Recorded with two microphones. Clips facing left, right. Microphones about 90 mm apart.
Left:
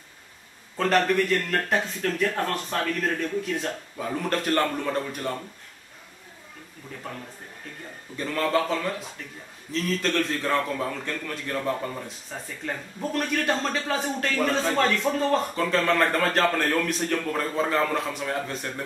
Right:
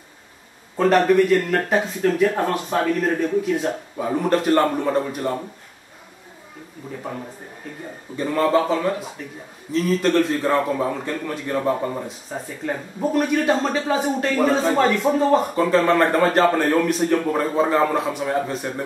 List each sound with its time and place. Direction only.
0.7 s a man's voice: 10° right (ahead or behind)
7.0 s a man's voice: 15° right (ahead or behind)
12.1 s a man's voice: 5° right (ahead or behind)